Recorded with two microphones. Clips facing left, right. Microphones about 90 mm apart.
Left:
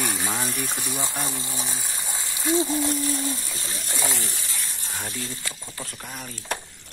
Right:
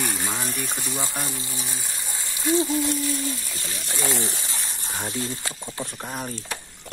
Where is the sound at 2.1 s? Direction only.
20° left (ahead or behind).